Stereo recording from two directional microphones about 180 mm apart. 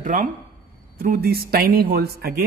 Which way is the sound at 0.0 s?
45° right (ahead or behind).